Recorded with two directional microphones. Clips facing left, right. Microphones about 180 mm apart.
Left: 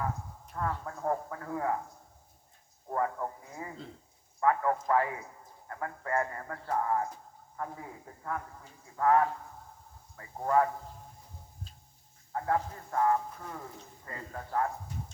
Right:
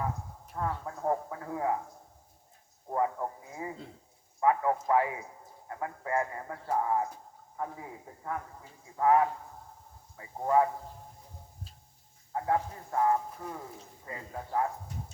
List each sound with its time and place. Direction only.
0.5 s speech: 20° right (ahead or behind)
2.9 s speech: 15° right (ahead or behind)
12.3 s speech: 20° right (ahead or behind)